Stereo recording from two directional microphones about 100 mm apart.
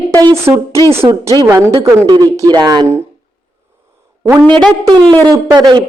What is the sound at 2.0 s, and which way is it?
Speech, 40° right (ahead or behind).